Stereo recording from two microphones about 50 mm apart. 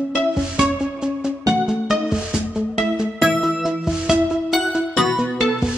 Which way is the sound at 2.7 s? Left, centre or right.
Centre.